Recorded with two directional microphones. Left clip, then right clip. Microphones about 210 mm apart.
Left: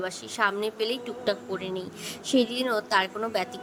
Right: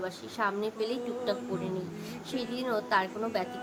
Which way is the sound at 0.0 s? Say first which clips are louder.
Left 5 dB; 35° left (ahead or behind).